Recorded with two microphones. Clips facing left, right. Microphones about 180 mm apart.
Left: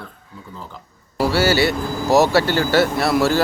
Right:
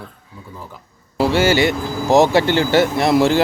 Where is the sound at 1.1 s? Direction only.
20° right (ahead or behind).